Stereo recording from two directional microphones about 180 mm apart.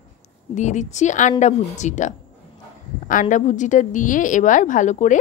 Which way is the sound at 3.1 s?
45° left (ahead or behind).